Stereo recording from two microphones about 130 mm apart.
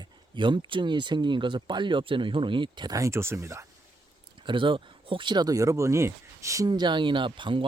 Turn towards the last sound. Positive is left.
turn(degrees=-40)  # may be behind; listen again after turning